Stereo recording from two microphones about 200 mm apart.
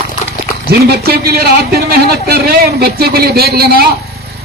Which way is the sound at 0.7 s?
50° right (ahead or behind).